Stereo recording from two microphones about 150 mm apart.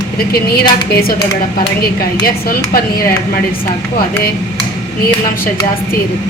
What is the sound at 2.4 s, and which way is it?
Speech, 85° left.